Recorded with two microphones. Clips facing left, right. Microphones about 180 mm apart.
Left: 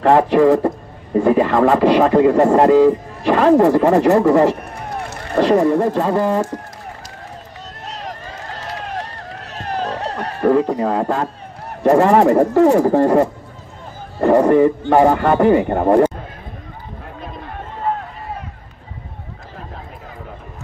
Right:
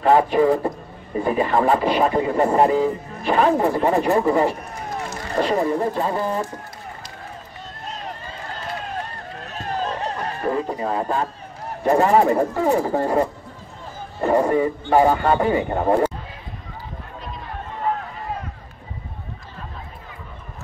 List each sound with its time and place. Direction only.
0.0 s a man's voice: 80° left
7.8 s run: 80° left
11.8 s speech: 70° left (ahead or behind)